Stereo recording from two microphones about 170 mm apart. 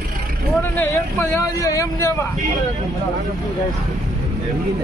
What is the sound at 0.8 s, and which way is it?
Speech, 15° left (ahead or behind).